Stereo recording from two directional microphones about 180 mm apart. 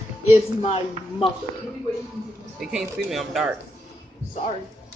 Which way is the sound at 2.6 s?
Centre (ahead or behind).